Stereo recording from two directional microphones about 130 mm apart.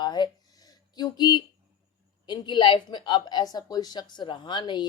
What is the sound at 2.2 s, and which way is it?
A woman's voice, 35° left (ahead or behind).